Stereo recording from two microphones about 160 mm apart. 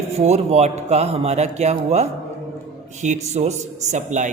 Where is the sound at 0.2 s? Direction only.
40° right (ahead or behind).